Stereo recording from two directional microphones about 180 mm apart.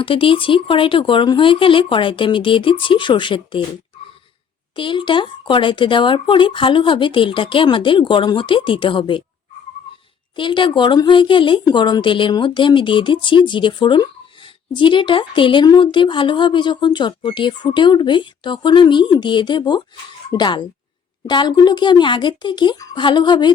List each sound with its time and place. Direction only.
0.0 s speech: 30° left (ahead or behind)
4.7 s speech: 25° left (ahead or behind)
10.3 s speech: 25° left (ahead or behind)